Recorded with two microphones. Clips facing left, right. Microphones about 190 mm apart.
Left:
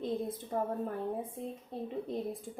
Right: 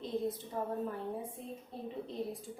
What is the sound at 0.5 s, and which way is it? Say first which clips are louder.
Speech: left 4 dB; 50° left (ahead or behind).